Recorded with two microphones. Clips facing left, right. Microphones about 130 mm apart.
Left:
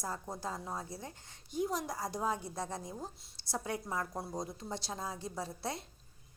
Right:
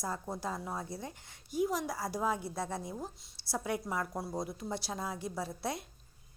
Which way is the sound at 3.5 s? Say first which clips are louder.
Right 2 dB; 10° right (ahead or behind).